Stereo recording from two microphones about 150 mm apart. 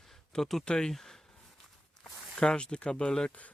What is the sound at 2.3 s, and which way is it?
Speech, 5° left (ahead or behind).